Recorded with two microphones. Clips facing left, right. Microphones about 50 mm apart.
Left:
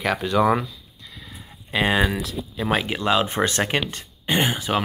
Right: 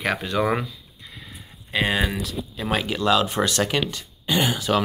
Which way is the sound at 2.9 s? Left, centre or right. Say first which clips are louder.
Right 1 dB; left.